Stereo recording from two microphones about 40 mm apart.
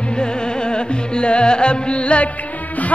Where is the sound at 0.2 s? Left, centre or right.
Left.